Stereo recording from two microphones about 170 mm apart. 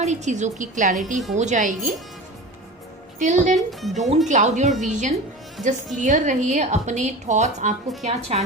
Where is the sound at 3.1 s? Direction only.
45° right (ahead or behind).